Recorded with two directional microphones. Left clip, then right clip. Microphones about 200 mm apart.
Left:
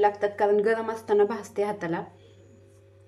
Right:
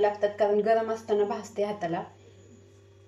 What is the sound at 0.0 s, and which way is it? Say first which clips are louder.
A woman's voice: left 2 dB; 45° left (ahead or behind).